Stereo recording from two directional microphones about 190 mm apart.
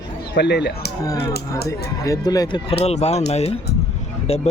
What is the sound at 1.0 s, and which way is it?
Speech, 20° left (ahead or behind).